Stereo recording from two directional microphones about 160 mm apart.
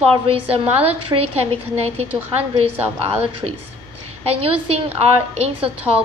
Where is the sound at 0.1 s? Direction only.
35° right (ahead or behind).